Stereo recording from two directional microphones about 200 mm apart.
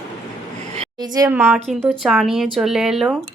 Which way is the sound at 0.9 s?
20° right (ahead or behind).